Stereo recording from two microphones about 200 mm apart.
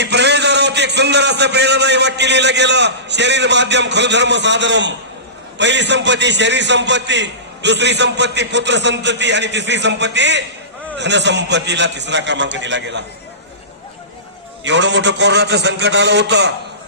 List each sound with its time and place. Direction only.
0.0 s a sound: 60° right (ahead or behind)
5.5 s a man's voice: 60° right (ahead or behind)
14.6 s a man's voice: 65° right (ahead or behind)